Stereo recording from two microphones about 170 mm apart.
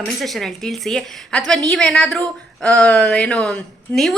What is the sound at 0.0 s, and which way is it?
Speech, centre (ahead or behind).